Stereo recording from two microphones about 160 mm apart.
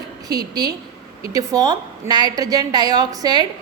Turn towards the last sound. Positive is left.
turn(degrees=-25)  # may be behind; listen again after turning